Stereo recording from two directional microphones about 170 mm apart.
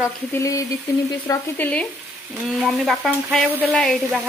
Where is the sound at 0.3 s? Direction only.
20° left (ahead or behind).